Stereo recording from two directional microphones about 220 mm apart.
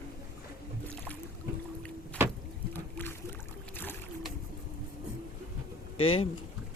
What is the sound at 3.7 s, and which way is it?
Boat, 10° left (ahead or behind).